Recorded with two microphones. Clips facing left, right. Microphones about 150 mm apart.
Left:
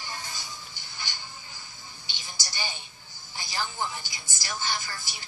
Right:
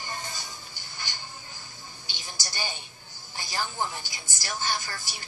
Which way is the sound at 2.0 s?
50° right (ahead or behind).